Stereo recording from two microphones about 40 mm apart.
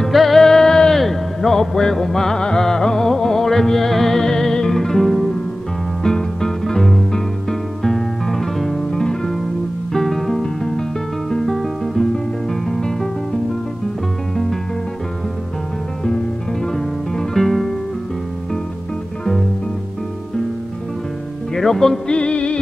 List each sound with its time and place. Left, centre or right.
0.0 s music: centre
16.7 s music: centre
21.5 s music: centre
22.1 s music: left